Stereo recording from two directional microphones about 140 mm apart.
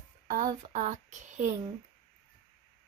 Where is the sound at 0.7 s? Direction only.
55° right (ahead or behind).